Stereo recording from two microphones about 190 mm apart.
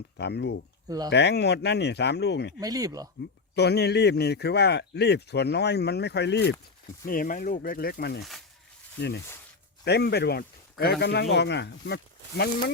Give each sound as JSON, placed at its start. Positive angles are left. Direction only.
{"t": 0.2, "sound": "a man's voice", "side_deg": 60}
{"t": 0.9, "sound": "speech", "side_deg": -20}
{"t": 1.1, "sound": "a man's voice", "side_deg": 60}
{"t": 2.6, "sound": "speech", "side_deg": -20}
{"t": 3.5, "sound": "a man's voice", "side_deg": 60}
{"t": 7.0, "sound": "a man's voice", "side_deg": 45}